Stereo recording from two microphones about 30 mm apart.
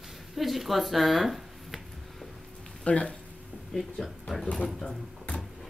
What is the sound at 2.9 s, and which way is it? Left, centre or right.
Speech, left.